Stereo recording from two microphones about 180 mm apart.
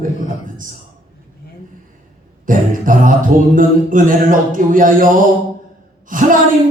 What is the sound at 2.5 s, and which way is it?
Speech, 50° right (ahead or behind).